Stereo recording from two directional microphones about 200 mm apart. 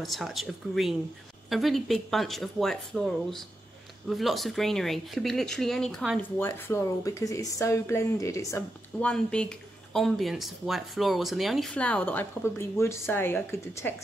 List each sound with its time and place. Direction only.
0.0 s speech: centre (ahead or behind); by 9.1 s 15° left (ahead or behind)
9.1 s speech: 5° left (ahead or behind)